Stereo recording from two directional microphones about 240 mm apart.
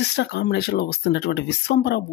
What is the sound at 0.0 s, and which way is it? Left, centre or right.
Speech, left.